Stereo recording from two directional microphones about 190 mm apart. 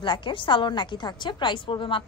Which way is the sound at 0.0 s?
25° left (ahead or behind).